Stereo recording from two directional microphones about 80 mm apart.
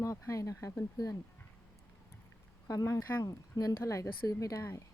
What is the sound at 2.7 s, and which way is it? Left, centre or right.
Speech, left.